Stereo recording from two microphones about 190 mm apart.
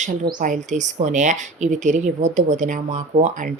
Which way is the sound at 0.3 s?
45° right (ahead or behind).